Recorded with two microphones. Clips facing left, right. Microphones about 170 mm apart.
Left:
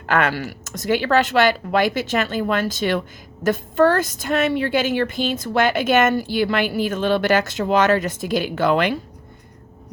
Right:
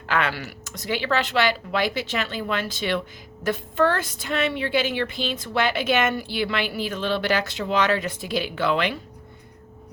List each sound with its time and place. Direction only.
0.0 s a woman's voice: 50° left (ahead or behind)